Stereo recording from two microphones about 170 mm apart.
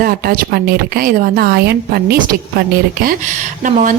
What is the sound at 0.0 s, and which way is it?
A woman's voice, 60° right (ahead or behind).